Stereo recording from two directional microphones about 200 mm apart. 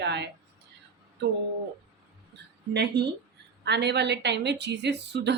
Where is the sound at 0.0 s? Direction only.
60° right (ahead or behind).